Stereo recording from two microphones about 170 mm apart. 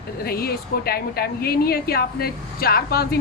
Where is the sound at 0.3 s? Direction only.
65° left (ahead or behind).